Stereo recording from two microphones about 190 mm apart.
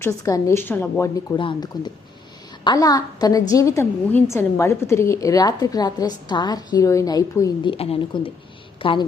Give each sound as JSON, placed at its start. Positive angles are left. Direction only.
{"t": 0.0, "sound": "a woman's voice", "side_deg": 15}